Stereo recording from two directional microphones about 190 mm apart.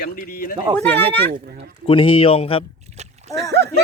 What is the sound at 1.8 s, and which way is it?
Speech, 30° left (ahead or behind).